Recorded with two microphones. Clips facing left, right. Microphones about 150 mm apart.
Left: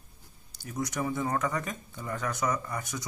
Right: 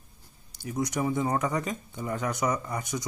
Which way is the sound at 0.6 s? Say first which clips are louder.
Right 4 dB; 15° right (ahead or behind).